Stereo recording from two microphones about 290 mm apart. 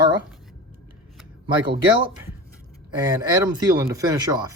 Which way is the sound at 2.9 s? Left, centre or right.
Centre.